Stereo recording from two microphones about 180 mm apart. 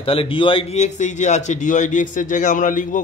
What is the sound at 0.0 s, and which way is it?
A man's voice, 30° left (ahead or behind).